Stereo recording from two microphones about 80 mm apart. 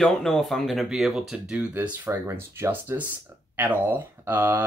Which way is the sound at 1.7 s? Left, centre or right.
Right.